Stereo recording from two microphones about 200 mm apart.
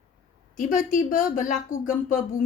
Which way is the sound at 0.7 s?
40° left (ahead or behind).